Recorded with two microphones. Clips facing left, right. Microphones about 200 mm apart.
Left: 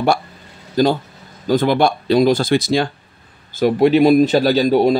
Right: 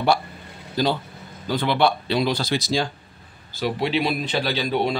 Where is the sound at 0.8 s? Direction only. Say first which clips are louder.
Left 7 dB; 45° left (ahead or behind).